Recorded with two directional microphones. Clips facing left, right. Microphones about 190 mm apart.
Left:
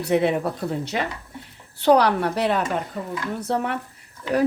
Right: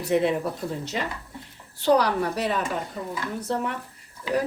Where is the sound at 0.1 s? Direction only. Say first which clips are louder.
Left 2 dB; 65° left (ahead or behind).